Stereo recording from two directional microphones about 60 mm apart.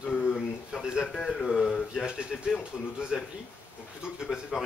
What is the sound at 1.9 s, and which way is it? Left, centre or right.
Speech, centre.